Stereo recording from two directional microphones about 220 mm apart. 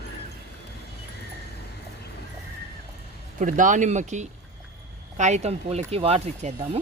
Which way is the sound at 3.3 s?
35° right (ahead or behind).